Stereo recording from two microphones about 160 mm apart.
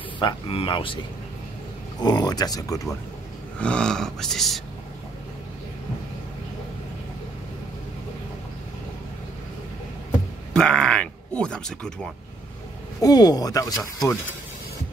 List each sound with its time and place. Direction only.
0.2 s speech: 30° left (ahead or behind)
2.0 s speech: 25° left (ahead or behind)
3.5 s speech: 5° left (ahead or behind)
10.5 s speech: 5° left (ahead or behind)
13.0 s speech: 25° left (ahead or behind)